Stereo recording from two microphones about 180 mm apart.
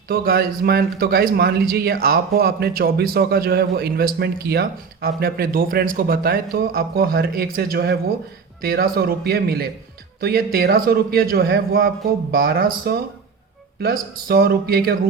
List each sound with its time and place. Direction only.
0.1 s a man's voice: 55° right (ahead or behind)